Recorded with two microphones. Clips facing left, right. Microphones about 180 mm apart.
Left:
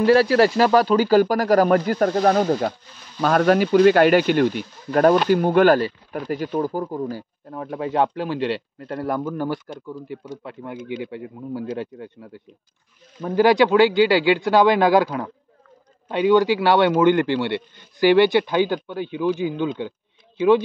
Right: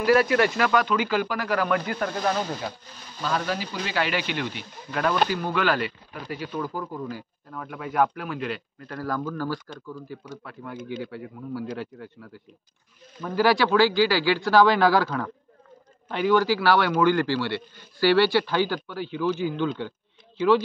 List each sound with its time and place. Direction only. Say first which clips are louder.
0.0 s speech: left 5 dB; 30° left (ahead or behind); by 2.7 s 45° left (ahead or behind)
3.2 s speech: left 11 dB; 60° left (ahead or behind); by 20.6 s 20° left (ahead or behind)